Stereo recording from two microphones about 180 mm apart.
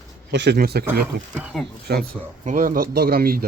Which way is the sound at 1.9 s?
65° right (ahead or behind).